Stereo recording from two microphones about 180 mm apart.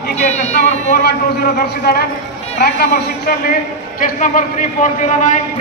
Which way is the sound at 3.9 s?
45° left (ahead or behind).